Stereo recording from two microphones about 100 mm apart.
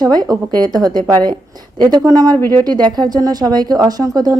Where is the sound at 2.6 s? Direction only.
45° right (ahead or behind).